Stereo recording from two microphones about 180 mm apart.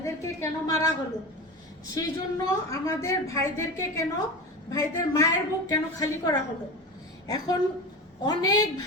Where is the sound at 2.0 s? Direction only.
20° left (ahead or behind).